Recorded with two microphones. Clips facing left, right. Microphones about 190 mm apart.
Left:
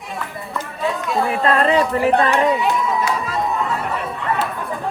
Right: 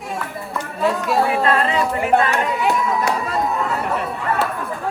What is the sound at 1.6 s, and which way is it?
Chatter, 35° left (ahead or behind).